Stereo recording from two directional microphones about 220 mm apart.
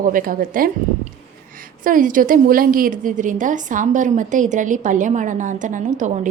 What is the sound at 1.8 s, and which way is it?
A woman's voice, 40° right (ahead or behind).